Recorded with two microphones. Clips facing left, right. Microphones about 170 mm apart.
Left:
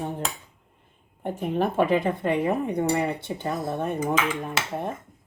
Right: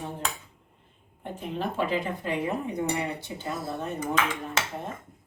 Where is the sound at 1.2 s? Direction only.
50° left (ahead or behind).